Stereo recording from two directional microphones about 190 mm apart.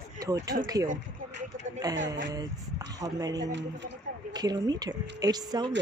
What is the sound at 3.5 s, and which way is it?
Speech, 70° right (ahead or behind).